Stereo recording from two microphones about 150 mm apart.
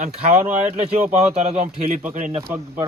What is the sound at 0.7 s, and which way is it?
Speech, 45° right (ahead or behind).